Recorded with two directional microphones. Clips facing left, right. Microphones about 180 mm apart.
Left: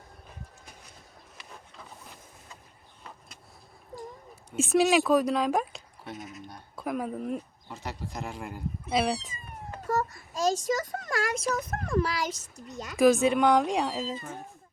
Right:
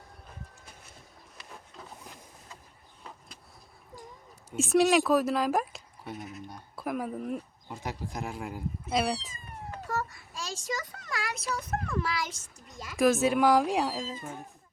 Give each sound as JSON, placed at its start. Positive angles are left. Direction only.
{"t": 4.5, "sound": "speech", "side_deg": 0}
{"t": 9.8, "sound": "a sound", "side_deg": 45}
{"t": 13.0, "sound": "speech", "side_deg": 0}